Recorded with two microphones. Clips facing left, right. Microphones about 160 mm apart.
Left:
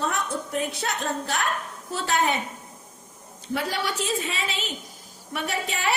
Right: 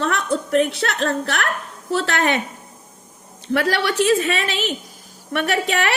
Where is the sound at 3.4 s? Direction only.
80° right.